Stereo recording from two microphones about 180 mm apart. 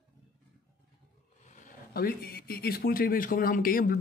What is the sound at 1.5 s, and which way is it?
Speech, 45° left (ahead or behind).